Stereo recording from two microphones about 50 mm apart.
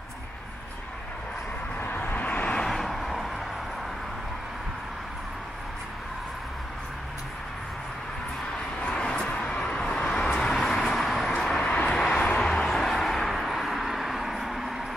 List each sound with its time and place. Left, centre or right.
2.0 s vehicle: left
2.6 s vehicle: centre
9.3 s vehicle: left; by 11.6 s centre
11.6 s vehicle: left
12.4 s a sound: centre